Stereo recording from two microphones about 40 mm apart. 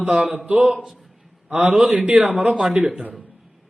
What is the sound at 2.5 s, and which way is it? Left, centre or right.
Speech, centre.